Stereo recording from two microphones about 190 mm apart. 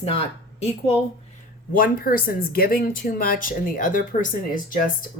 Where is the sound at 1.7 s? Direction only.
50° left (ahead or behind).